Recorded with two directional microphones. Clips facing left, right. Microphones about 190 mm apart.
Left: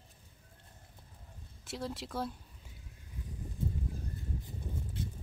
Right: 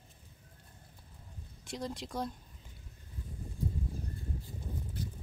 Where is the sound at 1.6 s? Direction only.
5° left (ahead or behind).